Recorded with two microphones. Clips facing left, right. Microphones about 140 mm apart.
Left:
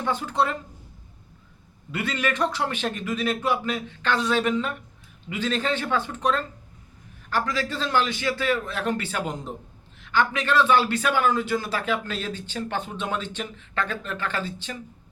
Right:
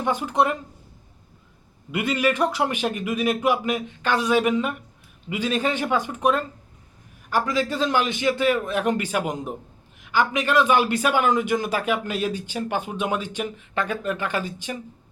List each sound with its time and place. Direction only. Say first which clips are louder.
0.0 s a man's voice: right 3 dB; 15° right (ahead or behind)
1.9 s a man's voice: right 5 dB; 15° right (ahead or behind)